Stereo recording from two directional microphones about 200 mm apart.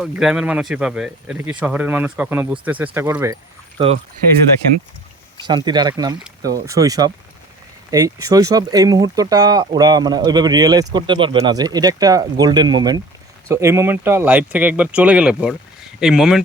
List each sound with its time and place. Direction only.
0.0 s speech: 5° right (ahead or behind)
3.8 s speech: 25° right (ahead or behind)
5.4 s speech: 20° right (ahead or behind); by 16.4 s 5° right (ahead or behind)